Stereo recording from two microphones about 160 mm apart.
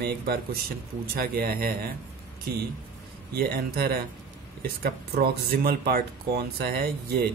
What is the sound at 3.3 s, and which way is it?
Speech, 70° right (ahead or behind).